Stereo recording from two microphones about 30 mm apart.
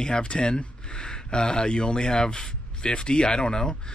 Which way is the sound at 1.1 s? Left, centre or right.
Left.